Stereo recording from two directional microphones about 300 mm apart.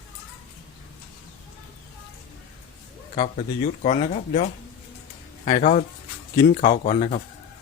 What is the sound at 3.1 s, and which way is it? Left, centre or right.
Speech, left.